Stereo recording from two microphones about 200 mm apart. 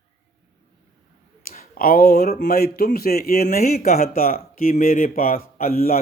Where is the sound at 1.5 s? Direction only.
45° left (ahead or behind).